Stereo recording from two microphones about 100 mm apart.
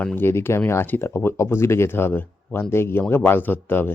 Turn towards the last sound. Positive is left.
turn(degrees=20)  # may be behind; listen again after turning